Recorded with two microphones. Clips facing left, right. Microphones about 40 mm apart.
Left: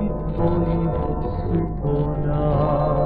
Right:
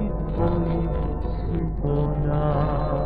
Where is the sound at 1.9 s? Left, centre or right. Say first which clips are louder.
Even; centre.